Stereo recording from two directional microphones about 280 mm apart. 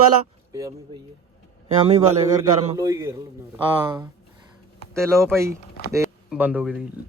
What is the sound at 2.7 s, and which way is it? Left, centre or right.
Speech, centre.